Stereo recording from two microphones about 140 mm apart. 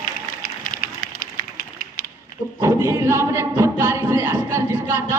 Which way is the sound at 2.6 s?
20° right (ahead or behind).